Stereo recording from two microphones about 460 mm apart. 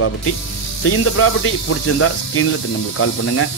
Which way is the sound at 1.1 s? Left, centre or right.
Left.